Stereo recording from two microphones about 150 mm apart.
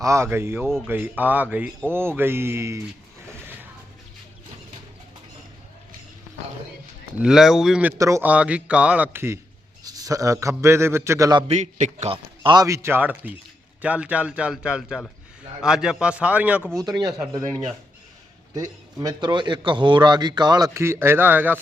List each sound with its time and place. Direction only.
0.0 s a man's voice: 20° right (ahead or behind)
7.2 s speech: 5° right (ahead or behind)
7.9 s a man's voice: 20° right (ahead or behind)
8.3 s a man's voice: 10° right (ahead or behind); by 11.4 s 25° right (ahead or behind)
11.4 s a man's voice: 50° right (ahead or behind)
12.1 s a man's voice: 35° right (ahead or behind); by 16.6 s 10° right (ahead or behind)
16.8 s a man's voice: 25° right (ahead or behind)
18.5 s a man's voice: 25° right (ahead or behind)